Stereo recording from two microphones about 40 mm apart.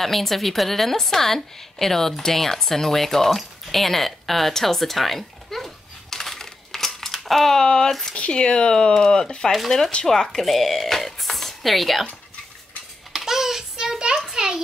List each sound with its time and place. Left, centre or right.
0.0 s a woman's voice: centre
7.6 s speech: left
10.4 s speech: centre
13.1 s child singing: centre
13.9 s a sound: right